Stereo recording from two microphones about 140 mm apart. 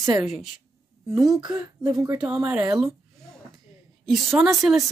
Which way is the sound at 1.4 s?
30° right (ahead or behind).